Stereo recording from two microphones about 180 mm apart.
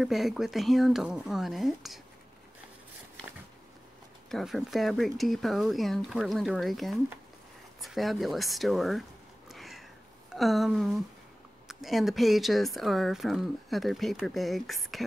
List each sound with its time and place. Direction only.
0.0 s speech: centre (ahead or behind)
4.3 s speech: centre (ahead or behind)
9.5 s a sound: centre (ahead or behind)
10.3 s speech: centre (ahead or behind)